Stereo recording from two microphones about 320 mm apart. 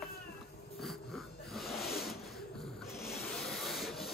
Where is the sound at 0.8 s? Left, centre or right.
Centre.